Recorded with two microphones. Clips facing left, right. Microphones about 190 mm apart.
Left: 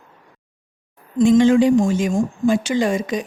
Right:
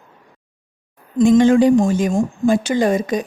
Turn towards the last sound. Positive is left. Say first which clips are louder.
# right 3 dB
turn(degrees=-40)  # may be behind; listen again after turning